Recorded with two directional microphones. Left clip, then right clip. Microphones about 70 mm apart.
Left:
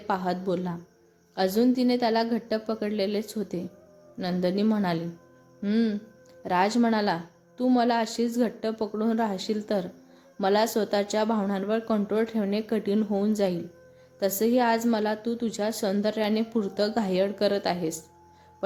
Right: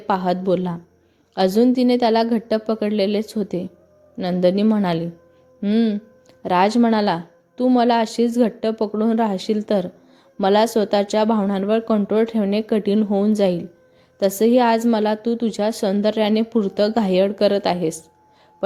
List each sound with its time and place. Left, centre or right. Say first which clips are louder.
0.1 s a woman's voice: right 8 dB; right
5.6 s speech: right 7 dB; centre
6.4 s a woman's voice: right 7 dB; right